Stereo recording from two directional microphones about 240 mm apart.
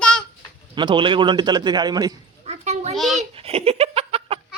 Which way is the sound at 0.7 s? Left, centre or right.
Centre.